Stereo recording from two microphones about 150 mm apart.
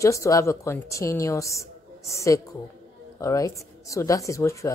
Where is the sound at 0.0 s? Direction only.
20° left (ahead or behind).